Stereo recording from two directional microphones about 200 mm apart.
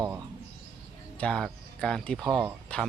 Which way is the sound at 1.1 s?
5° left (ahead or behind).